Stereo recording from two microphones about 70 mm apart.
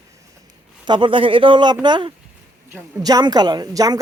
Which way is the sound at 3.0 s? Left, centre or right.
Right.